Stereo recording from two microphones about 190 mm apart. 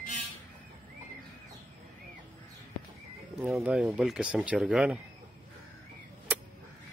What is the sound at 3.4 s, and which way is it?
Speech, centre (ahead or behind).